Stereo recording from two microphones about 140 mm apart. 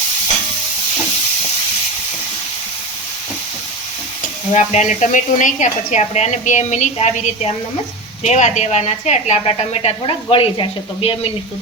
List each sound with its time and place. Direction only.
4.5 s a woman's voice: 60° left (ahead or behind); by 11.3 s 40° left (ahead or behind)